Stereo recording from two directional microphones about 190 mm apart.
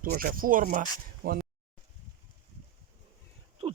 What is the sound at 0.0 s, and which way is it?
Speech, 50° right (ahead or behind).